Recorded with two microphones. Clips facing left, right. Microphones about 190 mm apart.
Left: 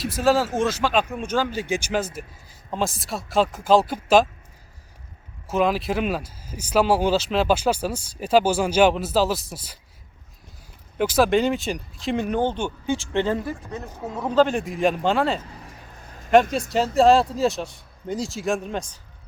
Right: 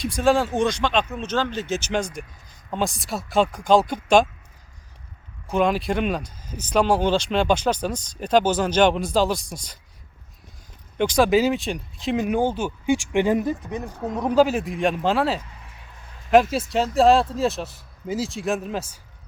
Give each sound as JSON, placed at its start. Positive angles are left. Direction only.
{"t": 0.0, "sound": "speech", "side_deg": 5}
{"t": 5.5, "sound": "speech", "side_deg": 0}
{"t": 10.9, "sound": "speech", "side_deg": 5}
{"t": 15.4, "sound": "vehicle", "side_deg": 40}
{"t": 16.3, "sound": "speech", "side_deg": 0}